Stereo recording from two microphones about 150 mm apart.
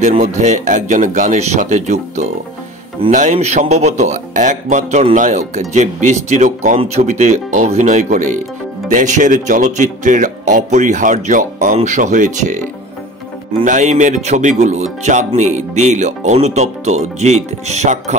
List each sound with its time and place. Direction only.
0.2 s speech: 55° right (ahead or behind)
13.7 s speech: 55° right (ahead or behind)